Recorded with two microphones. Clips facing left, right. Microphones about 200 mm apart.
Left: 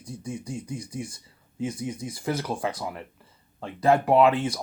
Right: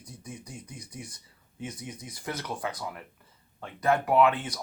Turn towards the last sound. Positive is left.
turn(degrees=25)  # may be behind; listen again after turning